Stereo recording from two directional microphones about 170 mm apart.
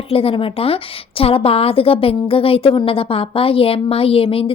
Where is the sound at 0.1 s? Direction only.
35° left (ahead or behind).